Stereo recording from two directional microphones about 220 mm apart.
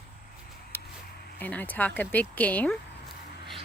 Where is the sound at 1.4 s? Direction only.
10° left (ahead or behind).